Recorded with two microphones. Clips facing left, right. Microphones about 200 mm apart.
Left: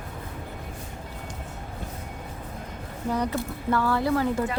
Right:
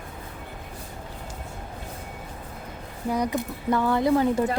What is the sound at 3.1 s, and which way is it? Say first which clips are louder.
Speech: right 1 dB; 15° right (ahead or behind).